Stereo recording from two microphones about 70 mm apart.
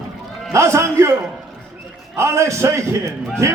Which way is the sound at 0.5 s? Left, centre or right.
Right.